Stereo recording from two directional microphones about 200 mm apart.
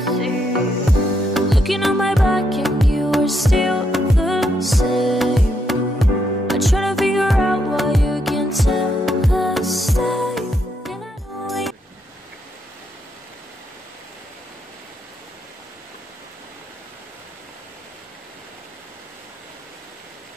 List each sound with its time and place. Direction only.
0.0 s music: centre (ahead or behind)
1.3 s music: centre (ahead or behind)